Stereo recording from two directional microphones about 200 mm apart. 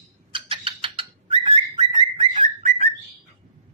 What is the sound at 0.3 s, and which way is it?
Bird, 25° right (ahead or behind).